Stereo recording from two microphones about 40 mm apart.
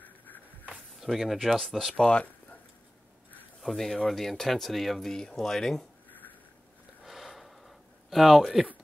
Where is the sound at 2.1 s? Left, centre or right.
Left.